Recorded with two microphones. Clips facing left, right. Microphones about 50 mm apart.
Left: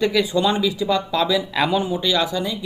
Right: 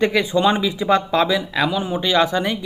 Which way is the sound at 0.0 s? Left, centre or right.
Right.